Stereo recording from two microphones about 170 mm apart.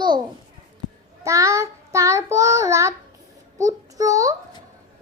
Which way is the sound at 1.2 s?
15° right (ahead or behind).